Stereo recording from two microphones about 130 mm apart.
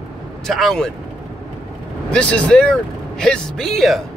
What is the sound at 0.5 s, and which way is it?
Speech, centre (ahead or behind).